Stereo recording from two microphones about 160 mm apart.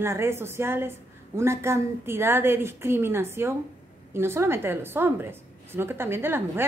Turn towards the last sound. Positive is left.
turn(degrees=-15)  # may be behind; listen again after turning